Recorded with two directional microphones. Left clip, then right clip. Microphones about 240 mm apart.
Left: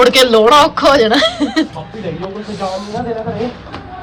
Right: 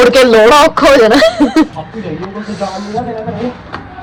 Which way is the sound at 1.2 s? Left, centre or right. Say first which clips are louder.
Right 5 dB; right.